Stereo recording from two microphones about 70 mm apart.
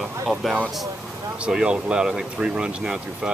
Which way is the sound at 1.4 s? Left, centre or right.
Centre.